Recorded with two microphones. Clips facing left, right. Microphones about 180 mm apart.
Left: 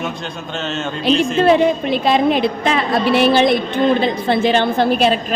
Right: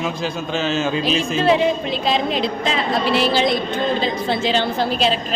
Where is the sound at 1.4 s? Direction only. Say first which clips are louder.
Left 2 dB; 55° left (ahead or behind).